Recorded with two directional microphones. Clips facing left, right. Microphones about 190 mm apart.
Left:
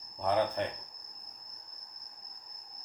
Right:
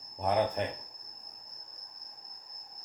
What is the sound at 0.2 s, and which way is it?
Speech, 15° right (ahead or behind).